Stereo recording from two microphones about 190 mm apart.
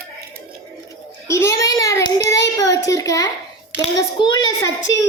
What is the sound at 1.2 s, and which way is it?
A child's voice, 15° left (ahead or behind).